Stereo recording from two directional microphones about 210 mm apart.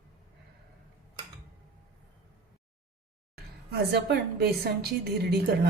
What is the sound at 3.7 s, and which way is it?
A woman's voice, 50° right (ahead or behind).